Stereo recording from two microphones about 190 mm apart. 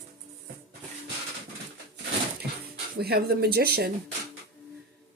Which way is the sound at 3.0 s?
55° right (ahead or behind).